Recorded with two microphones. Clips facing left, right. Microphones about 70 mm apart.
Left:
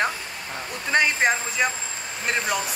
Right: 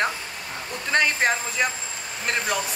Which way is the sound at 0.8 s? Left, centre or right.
Centre.